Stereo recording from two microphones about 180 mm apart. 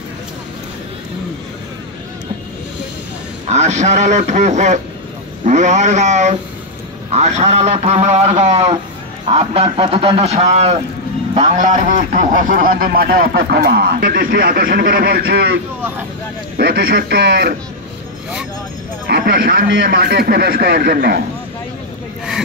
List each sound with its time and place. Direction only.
3.4 s a man's voice: 40° right (ahead or behind); by 17.6 s 70° right (ahead or behind)
19.0 s a man's voice: 60° right (ahead or behind)